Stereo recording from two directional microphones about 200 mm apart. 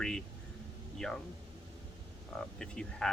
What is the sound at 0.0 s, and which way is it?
Speech, 5° left (ahead or behind).